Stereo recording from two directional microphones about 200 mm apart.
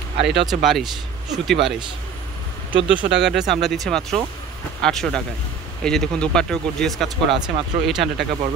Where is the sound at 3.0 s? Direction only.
60° right (ahead or behind).